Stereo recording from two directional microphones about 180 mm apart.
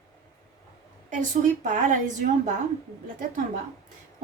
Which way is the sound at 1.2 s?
45° right (ahead or behind).